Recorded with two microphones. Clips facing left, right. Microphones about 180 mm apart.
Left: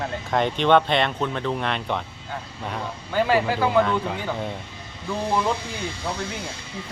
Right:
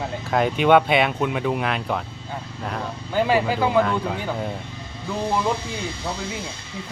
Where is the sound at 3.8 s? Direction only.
5° right (ahead or behind).